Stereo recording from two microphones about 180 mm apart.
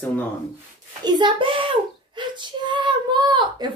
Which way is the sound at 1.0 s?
25° right (ahead or behind).